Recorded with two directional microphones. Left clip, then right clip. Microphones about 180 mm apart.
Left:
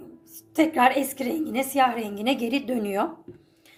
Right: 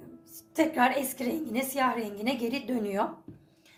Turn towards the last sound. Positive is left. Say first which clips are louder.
# left 5 dB
turn(degrees=30)  # may be behind; listen again after turning